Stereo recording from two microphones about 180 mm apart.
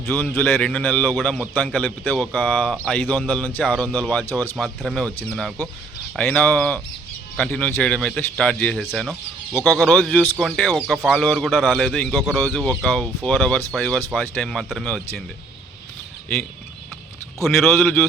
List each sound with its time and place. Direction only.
0.0 s a man's voice: 10° left (ahead or behind)
4.5 s a man's voice: centre (ahead or behind)